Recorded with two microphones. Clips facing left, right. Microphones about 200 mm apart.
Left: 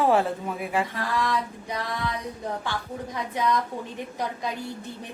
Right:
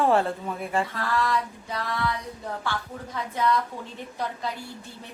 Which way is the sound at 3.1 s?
15° left (ahead or behind).